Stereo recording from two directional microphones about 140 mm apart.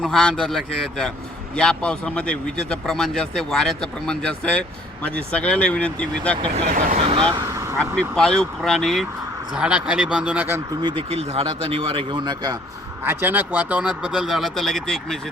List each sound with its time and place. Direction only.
0.0 s speech: centre (ahead or behind)
6.7 s speech: 65° right (ahead or behind)
7.1 s speech: 40° right (ahead or behind)
7.5 s vehicle: 20° right (ahead or behind)
7.8 s speech: 5° left (ahead or behind); by 10.6 s 10° right (ahead or behind)
10.8 s speech: 40° right (ahead or behind)
13.1 s speech: 15° right (ahead or behind); by 15.2 s centre (ahead or behind)